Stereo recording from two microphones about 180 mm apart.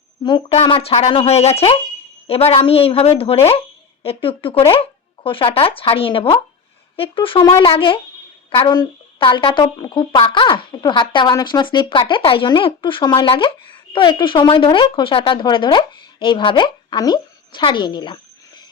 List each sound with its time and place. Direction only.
0.3 s a woman's voice: 25° left (ahead or behind)